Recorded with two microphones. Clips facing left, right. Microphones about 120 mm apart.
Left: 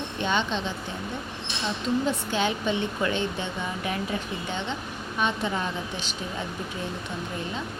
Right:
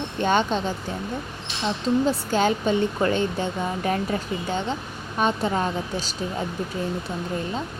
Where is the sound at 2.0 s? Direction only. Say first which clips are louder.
Right 5 dB; 40° right (ahead or behind).